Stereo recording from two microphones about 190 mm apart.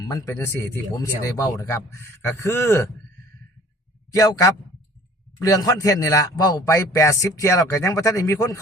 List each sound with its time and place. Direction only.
0.1 s a man's voice: 15° left (ahead or behind)
4.1 s a man's voice: 15° left (ahead or behind)